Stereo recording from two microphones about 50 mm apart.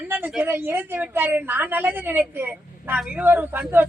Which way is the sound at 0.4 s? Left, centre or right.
Right.